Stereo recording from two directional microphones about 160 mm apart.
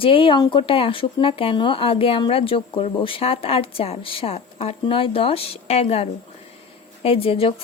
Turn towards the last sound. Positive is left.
turn(degrees=35)  # may be behind; listen again after turning